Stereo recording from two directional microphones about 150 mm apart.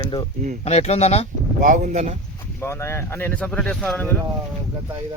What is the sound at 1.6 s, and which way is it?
Speech, 60° right (ahead or behind).